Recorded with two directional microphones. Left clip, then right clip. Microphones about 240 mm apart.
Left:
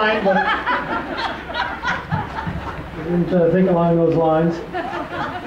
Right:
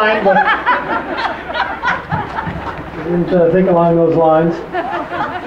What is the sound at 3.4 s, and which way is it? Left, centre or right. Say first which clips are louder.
Speech: right 4 dB; centre.